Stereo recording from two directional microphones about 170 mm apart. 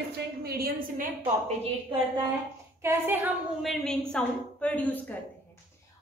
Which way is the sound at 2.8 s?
10° right (ahead or behind).